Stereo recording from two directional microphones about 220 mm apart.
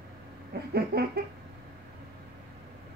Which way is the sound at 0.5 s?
45° right (ahead or behind).